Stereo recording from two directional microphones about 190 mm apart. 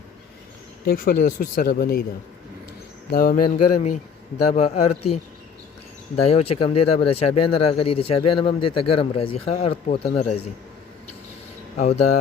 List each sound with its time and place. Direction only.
0.9 s speech: 50° left (ahead or behind)
3.1 s speech: 50° left (ahead or behind)
4.5 s speech: 35° left (ahead or behind)
6.2 s speech: 30° left (ahead or behind)
11.8 s speech: 35° left (ahead or behind)